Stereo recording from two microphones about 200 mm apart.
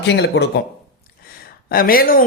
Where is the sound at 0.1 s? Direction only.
60° left (ahead or behind).